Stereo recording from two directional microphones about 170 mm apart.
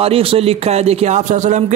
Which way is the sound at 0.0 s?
35° right (ahead or behind).